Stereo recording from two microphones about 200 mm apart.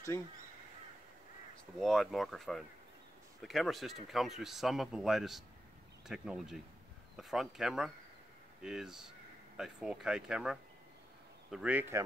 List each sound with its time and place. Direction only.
0.1 s speech: 15° left (ahead or behind)
1.8 s speech: centre (ahead or behind)